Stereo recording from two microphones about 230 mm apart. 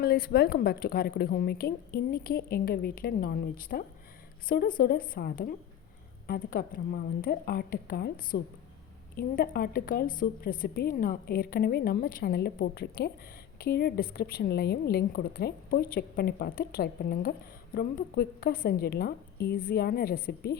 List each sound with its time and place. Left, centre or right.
0.0 s a woman's voice: left